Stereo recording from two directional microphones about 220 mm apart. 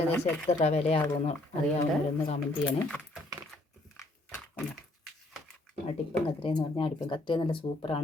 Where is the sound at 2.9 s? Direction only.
5° left (ahead or behind).